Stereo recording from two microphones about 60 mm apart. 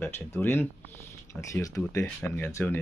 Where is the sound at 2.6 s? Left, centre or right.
Left.